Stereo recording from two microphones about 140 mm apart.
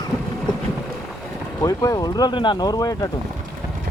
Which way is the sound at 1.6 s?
25° left (ahead or behind).